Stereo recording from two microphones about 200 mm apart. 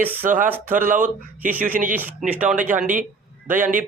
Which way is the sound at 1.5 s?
10° right (ahead or behind).